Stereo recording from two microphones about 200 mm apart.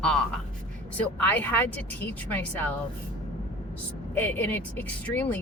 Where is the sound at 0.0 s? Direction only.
5° left (ahead or behind).